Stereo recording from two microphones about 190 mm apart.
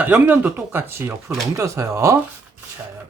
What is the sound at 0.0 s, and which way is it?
Speech, 10° right (ahead or behind).